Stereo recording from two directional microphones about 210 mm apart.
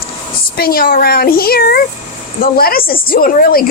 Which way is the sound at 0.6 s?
45° left (ahead or behind).